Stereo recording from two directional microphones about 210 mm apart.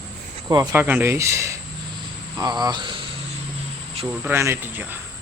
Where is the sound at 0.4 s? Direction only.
15° right (ahead or behind).